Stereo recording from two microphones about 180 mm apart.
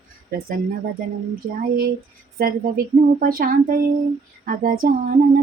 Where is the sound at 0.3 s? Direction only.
60° right (ahead or behind).